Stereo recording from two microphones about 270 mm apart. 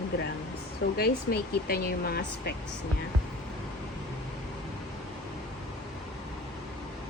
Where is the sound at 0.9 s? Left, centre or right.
Left.